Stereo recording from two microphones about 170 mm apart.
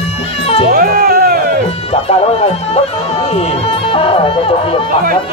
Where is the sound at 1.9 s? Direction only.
35° left (ahead or behind).